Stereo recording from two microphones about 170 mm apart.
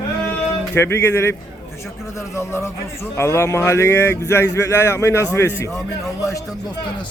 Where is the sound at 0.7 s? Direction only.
15° left (ahead or behind).